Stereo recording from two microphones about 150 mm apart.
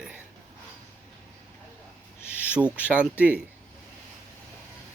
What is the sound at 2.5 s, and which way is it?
Speech, 10° right (ahead or behind).